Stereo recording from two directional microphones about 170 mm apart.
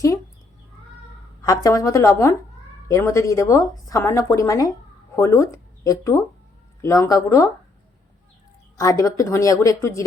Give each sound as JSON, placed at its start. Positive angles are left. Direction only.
{"t": 1.4, "sound": "a woman's voice", "side_deg": 20}
{"t": 8.8, "sound": "a woman's voice", "side_deg": 20}